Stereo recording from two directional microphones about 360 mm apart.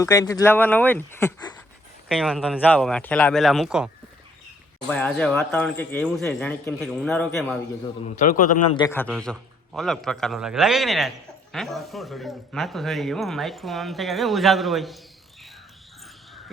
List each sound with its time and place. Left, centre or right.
0.0 s speech: centre
8.1 s a man's voice: left
8.8 s speech: centre